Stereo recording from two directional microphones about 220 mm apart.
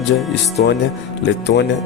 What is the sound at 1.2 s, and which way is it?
Speech, 50° left (ahead or behind).